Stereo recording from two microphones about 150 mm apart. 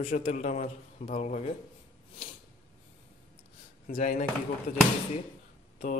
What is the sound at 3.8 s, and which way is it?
Speech, 60° left (ahead or behind).